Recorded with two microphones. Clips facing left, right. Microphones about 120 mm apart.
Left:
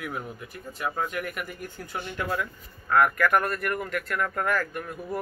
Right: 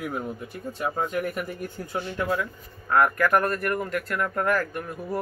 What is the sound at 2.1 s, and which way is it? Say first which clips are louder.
A man's voice: right 2 dB; 10° right (ahead or behind).